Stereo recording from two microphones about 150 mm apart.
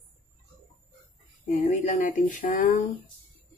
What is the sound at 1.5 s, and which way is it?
Speech, 50° left (ahead or behind).